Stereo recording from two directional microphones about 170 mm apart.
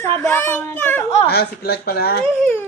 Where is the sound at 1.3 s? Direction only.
70° left (ahead or behind).